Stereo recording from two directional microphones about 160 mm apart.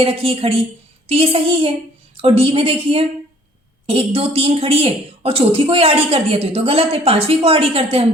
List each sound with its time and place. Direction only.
0.0 s a woman's voice: 35° right (ahead or behind)